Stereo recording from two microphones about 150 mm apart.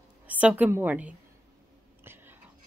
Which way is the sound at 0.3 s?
10° right (ahead or behind).